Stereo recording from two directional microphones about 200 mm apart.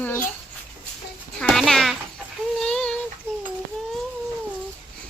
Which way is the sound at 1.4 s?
Centre (ahead or behind).